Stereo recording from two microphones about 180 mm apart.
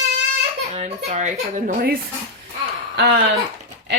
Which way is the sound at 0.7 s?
35° right (ahead or behind).